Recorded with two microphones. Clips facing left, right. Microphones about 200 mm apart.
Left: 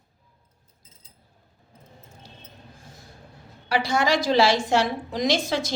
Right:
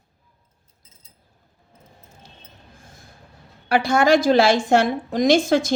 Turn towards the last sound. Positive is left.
turn(degrees=-50)  # may be behind; listen again after turning